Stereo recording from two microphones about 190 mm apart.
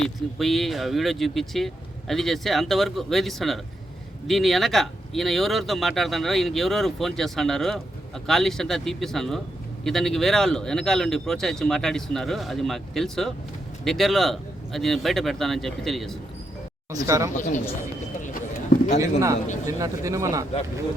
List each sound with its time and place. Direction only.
0.0 s speech: centre (ahead or behind)
16.9 s speech: 15° right (ahead or behind)
18.9 s a man's voice: 40° left (ahead or behind)
19.8 s speech: 15° right (ahead or behind)